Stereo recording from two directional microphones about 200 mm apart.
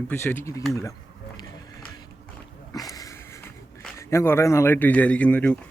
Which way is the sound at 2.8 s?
15° left (ahead or behind).